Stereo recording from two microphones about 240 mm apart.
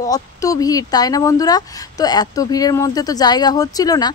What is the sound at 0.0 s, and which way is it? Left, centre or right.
Speech, centre.